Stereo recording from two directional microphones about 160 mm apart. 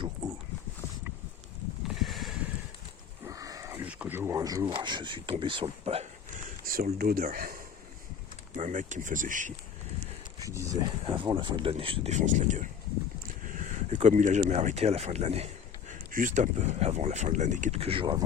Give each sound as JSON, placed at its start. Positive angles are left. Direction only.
{"t": 2.0, "sound": "a sound", "side_deg": 0}
{"t": 3.2, "sound": "a sound", "side_deg": -20}
{"t": 4.7, "sound": "speech", "side_deg": -30}
{"t": 6.7, "sound": "speech", "side_deg": -65}
{"t": 8.5, "sound": "speech", "side_deg": -55}
{"t": 10.5, "sound": "speech", "side_deg": -20}
{"t": 11.0, "sound": "speech", "side_deg": -30}
{"t": 12.1, "sound": "speech", "side_deg": -50}
{"t": 15.9, "sound": "speech", "side_deg": -55}